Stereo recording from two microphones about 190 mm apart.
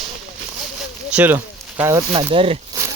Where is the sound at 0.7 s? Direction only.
5° right (ahead or behind).